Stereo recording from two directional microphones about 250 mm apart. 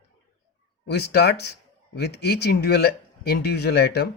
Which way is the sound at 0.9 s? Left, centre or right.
Left.